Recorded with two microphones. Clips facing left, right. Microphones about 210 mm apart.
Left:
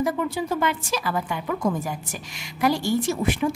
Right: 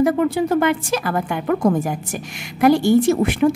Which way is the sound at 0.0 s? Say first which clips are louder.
Right 8 dB; 60° right (ahead or behind).